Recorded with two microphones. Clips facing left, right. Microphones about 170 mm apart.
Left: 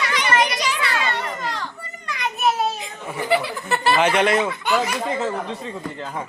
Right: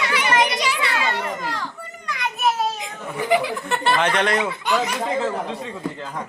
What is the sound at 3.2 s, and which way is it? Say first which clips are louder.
Speech: right 1 dB; 15° right (ahead or behind).